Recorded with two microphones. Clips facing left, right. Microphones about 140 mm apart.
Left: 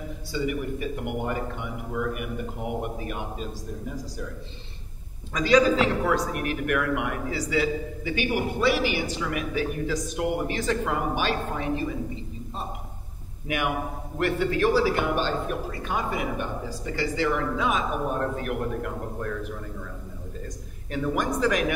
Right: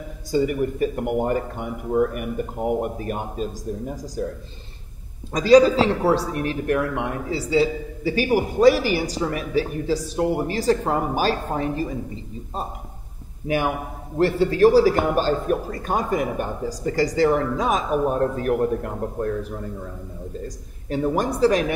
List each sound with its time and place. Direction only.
0.3 s speech: 40° right (ahead or behind)
5.3 s a man's voice: 35° right (ahead or behind)
13.5 s a man's voice: 35° right (ahead or behind)
20.4 s a man's voice: 35° right (ahead or behind)